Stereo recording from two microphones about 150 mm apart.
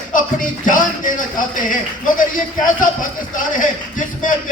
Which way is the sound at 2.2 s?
65° left (ahead or behind).